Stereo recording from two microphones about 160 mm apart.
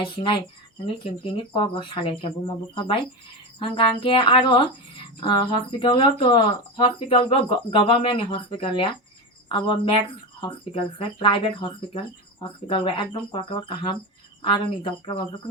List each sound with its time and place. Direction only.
0.0 s speech: 30° left (ahead or behind)